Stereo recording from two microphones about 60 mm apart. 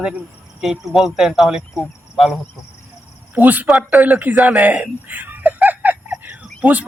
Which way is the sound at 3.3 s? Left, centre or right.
Right.